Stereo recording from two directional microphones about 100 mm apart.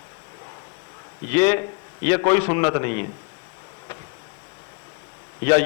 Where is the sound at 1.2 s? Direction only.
25° left (ahead or behind).